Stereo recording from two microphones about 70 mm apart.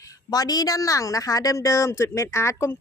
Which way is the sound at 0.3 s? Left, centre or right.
Left.